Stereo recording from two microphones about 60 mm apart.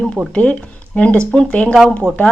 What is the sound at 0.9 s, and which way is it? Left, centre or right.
Speech, centre.